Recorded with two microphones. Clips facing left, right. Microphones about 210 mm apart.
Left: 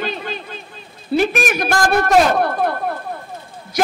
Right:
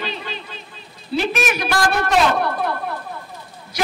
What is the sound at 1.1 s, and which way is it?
A man's voice, 50° left (ahead or behind).